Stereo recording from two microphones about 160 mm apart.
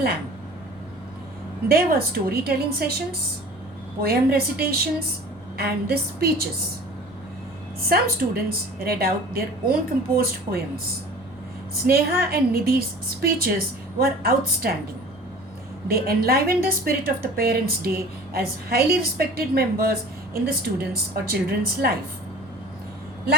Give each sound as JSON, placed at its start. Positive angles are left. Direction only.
{"t": 1.6, "sound": "a woman's voice", "side_deg": -70}
{"t": 4.0, "sound": "a woman's voice", "side_deg": -75}
{"t": 7.8, "sound": "a woman's voice", "side_deg": -70}
{"t": 11.7, "sound": "a woman's voice", "side_deg": -70}
{"t": 14.0, "sound": "a woman's voice", "side_deg": -70}
{"t": 15.9, "sound": "a woman's voice", "side_deg": -70}